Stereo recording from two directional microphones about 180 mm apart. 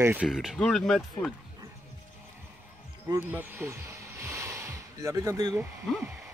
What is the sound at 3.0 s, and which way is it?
Music, 15° right (ahead or behind).